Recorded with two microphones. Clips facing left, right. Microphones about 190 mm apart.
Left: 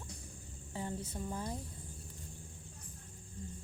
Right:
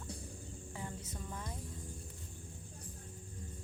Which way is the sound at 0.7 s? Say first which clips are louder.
Left 6 dB; 30° left (ahead or behind).